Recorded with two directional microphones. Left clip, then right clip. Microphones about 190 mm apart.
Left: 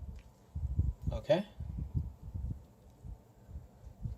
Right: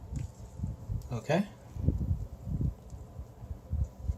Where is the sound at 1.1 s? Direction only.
40° left (ahead or behind).